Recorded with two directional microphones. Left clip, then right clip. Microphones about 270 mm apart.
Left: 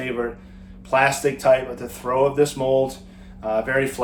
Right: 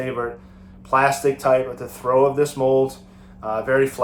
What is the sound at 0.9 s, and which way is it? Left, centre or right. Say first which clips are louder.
Speech: right 1 dB; centre.